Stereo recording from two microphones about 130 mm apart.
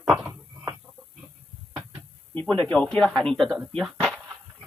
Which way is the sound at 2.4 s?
10° left (ahead or behind).